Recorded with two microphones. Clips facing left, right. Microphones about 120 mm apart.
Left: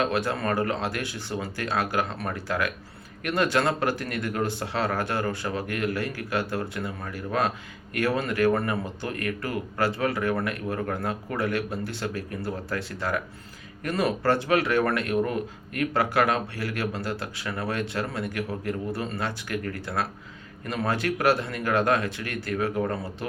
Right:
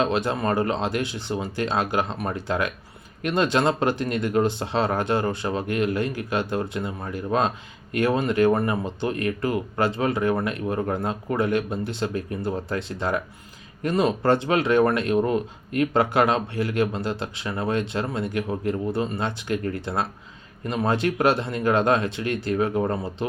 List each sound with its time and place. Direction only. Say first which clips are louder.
0.0 s speech: right 3 dB; 25° right (ahead or behind)